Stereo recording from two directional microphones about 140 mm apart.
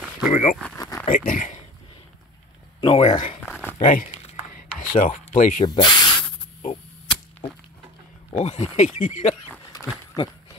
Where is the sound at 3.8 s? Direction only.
65° left (ahead or behind).